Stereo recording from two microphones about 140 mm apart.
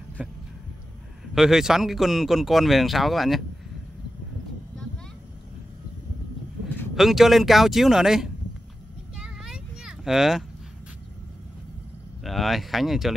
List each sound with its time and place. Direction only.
0.2 s heart sounds: 10° right (ahead or behind)
1.3 s speech: 5° right (ahead or behind)
7.0 s speech: centre (ahead or behind)
9.1 s a sound: 5° right (ahead or behind)
12.2 s speech: centre (ahead or behind)